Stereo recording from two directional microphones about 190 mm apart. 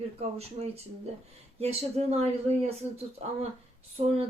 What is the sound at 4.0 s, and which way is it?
Speech, 35° right (ahead or behind).